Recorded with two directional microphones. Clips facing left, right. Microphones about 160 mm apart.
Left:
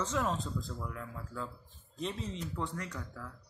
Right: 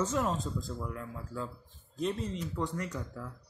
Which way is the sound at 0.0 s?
5° right (ahead or behind).